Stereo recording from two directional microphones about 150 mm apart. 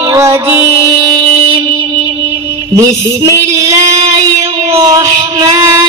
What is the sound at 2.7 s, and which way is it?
Female singing, 20° right (ahead or behind).